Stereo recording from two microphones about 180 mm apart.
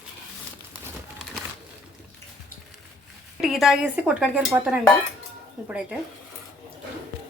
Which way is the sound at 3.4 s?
Centre (ahead or behind).